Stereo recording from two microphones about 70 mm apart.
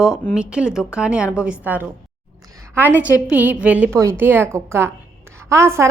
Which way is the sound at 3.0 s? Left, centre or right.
Right.